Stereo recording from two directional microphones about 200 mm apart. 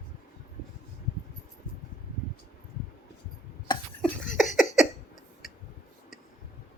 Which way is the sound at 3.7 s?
20° left (ahead or behind).